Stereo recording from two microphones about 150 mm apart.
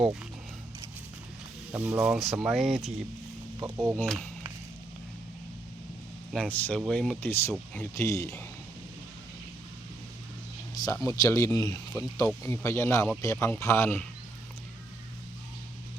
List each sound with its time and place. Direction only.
1.7 s speech: 10° right (ahead or behind)
3.6 s speech: 35° right (ahead or behind)
4.0 s speech: centre (ahead or behind)
6.3 s speech: 10° left (ahead or behind)
7.9 s speech: 20° left (ahead or behind)
11.0 s speech: 20° left (ahead or behind)